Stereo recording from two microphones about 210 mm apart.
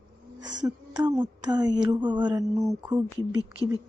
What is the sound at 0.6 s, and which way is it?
Speech, 20° right (ahead or behind).